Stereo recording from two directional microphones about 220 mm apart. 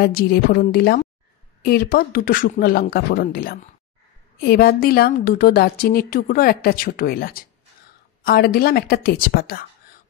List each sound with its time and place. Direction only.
0.0 s a woman's voice: 45° left (ahead or behind)